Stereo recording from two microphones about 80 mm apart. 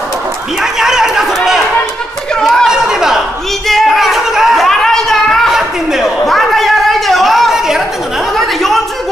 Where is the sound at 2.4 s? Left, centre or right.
Centre.